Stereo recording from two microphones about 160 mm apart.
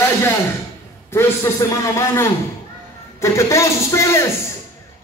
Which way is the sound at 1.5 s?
20° left (ahead or behind).